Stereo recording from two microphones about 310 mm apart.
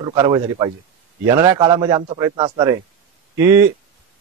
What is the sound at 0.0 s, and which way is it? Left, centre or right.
A man's voice, centre.